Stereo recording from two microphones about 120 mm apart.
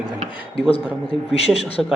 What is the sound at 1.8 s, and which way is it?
Speech, 5° right (ahead or behind).